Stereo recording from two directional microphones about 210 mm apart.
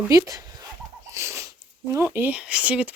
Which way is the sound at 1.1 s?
15° right (ahead or behind).